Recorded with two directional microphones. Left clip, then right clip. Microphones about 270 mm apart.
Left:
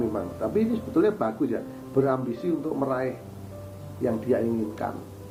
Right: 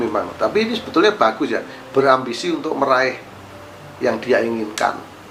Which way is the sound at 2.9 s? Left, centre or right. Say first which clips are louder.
Right 12 dB; centre.